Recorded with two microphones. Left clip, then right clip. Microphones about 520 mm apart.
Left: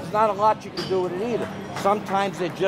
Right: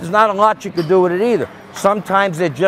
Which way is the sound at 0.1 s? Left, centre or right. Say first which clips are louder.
Right 7 dB; right.